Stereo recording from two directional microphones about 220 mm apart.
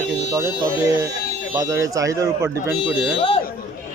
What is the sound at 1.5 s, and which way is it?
Speech, 15° right (ahead or behind).